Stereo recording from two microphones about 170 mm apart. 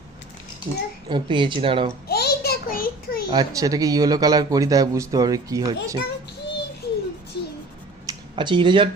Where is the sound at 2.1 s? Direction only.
70° left (ahead or behind).